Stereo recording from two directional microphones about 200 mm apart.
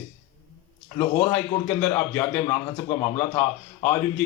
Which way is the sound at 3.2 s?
30° left (ahead or behind).